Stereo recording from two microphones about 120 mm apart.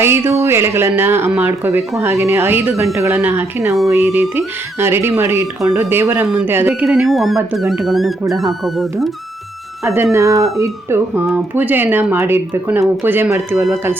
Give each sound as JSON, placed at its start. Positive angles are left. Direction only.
{"t": 0.0, "sound": "speech", "side_deg": -20}
{"t": 6.8, "sound": "speech", "side_deg": 0}
{"t": 9.8, "sound": "speech", "side_deg": -20}